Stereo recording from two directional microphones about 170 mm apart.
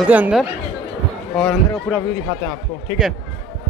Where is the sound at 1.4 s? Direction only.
5° left (ahead or behind).